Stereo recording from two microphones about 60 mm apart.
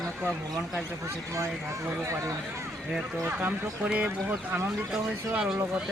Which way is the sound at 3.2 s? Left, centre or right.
Right.